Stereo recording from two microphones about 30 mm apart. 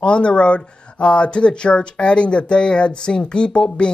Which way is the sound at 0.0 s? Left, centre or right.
Left.